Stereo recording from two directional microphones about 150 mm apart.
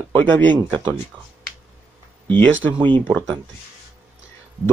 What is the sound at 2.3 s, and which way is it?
Speech, 10° left (ahead or behind).